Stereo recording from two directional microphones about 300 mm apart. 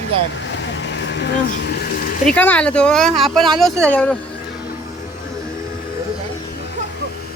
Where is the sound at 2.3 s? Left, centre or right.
Centre.